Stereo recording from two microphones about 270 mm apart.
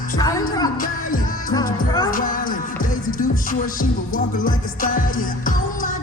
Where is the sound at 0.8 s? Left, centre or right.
Left.